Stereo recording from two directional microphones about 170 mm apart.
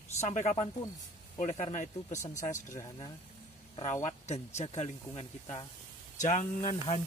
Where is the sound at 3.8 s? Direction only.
45° left (ahead or behind).